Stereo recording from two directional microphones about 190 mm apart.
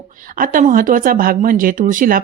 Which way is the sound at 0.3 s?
45° right (ahead or behind).